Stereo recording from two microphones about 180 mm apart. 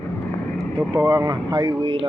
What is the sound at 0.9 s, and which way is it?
Speech, 20° right (ahead or behind).